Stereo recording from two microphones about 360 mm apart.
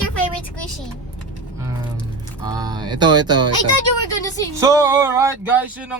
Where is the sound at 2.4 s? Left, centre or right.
Centre.